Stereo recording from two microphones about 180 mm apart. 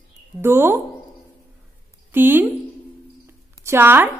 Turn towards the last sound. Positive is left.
turn(degrees=-10)  # may be behind; listen again after turning